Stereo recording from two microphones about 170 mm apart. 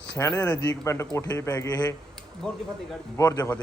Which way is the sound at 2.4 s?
5° left (ahead or behind).